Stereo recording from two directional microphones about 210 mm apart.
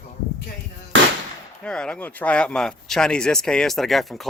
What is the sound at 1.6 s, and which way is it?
Speech, 5° left (ahead or behind).